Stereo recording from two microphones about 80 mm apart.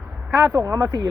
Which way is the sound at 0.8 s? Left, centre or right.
Right.